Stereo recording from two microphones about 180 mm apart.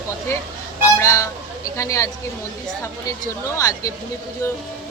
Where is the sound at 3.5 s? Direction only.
15° left (ahead or behind).